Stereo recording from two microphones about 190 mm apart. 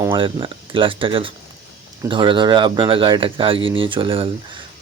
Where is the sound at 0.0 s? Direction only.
25° right (ahead or behind).